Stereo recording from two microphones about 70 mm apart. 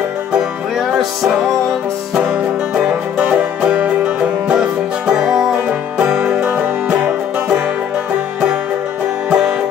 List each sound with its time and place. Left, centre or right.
0.4 s music: centre
2.2 s music: centre
9.3 s music: centre